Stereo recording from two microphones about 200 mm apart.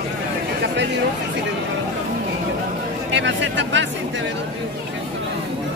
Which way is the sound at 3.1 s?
65° right (ahead or behind).